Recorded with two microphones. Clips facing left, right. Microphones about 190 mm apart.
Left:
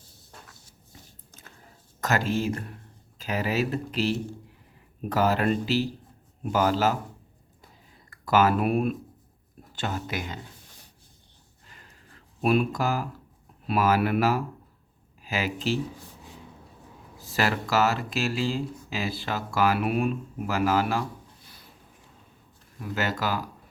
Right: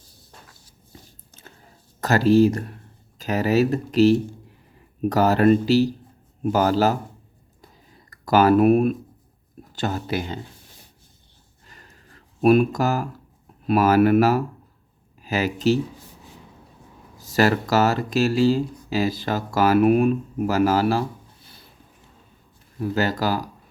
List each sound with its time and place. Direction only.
2.0 s speech: 35° right (ahead or behind)
8.1 s speech: 40° right (ahead or behind)
12.4 s speech: 45° right (ahead or behind)
17.2 s speech: 40° right (ahead or behind)
22.8 s speech: 35° right (ahead or behind)